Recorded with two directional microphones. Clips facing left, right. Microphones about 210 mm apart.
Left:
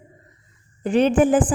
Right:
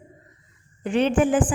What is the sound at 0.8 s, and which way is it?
Speech, 40° left (ahead or behind).